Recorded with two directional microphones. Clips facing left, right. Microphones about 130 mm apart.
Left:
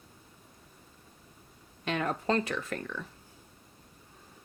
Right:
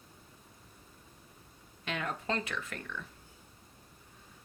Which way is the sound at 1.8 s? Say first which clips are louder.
Left 6 dB; 40° left (ahead or behind).